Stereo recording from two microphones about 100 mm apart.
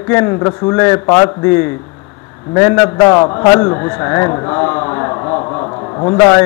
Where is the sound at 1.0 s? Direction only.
35° left (ahead or behind).